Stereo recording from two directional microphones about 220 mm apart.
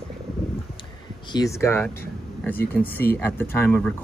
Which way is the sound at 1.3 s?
15° left (ahead or behind).